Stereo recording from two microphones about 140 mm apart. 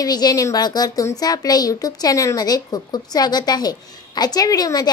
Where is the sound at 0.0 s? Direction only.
25° left (ahead or behind).